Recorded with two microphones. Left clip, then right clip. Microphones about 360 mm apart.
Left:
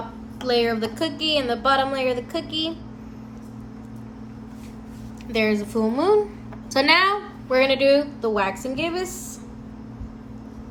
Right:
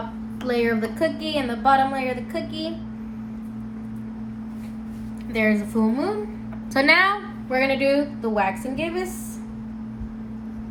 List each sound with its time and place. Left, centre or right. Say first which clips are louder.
0.4 s a woman's voice: left 1 dB; centre
5.3 s a woman's voice: even; centre